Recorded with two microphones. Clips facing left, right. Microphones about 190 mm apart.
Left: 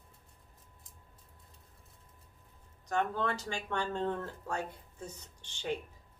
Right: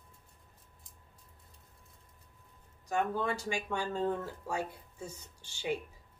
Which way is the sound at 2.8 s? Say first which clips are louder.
Right 1 dB; 10° right (ahead or behind).